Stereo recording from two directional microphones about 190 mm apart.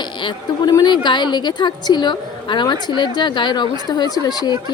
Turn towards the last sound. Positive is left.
turn(degrees=20)  # may be behind; listen again after turning